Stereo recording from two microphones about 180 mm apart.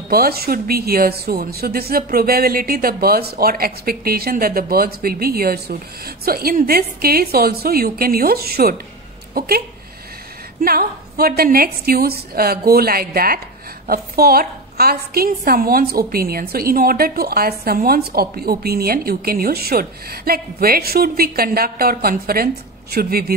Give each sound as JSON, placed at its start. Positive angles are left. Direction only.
{"t": 0.1, "sound": "a woman's voice", "side_deg": -60}
{"t": 10.6, "sound": "a woman's voice", "side_deg": -55}